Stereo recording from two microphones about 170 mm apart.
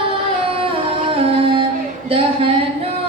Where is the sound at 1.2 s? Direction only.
30° right (ahead or behind).